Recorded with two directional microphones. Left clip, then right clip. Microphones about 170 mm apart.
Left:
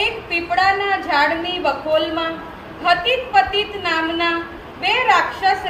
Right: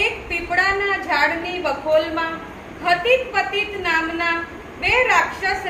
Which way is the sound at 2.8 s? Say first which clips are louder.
Even; 20° right (ahead or behind).